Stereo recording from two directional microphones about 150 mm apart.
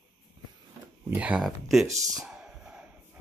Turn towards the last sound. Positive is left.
turn(degrees=-5)  # may be behind; listen again after turning